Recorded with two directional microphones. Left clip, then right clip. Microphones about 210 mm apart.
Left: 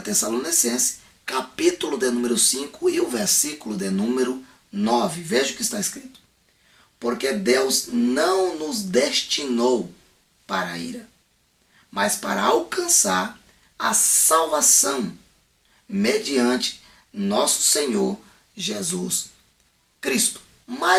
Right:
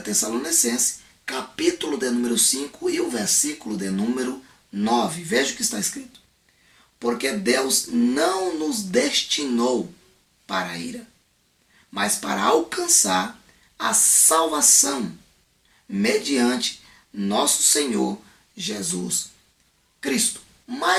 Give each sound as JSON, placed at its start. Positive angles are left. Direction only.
{"t": 0.0, "sound": "speech", "side_deg": 15}
{"t": 7.0, "sound": "speech", "side_deg": 10}
{"t": 11.9, "sound": "speech", "side_deg": 10}
{"t": 18.5, "sound": "speech", "side_deg": 15}